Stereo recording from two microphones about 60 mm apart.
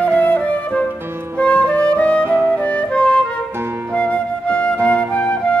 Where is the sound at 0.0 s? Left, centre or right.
Left.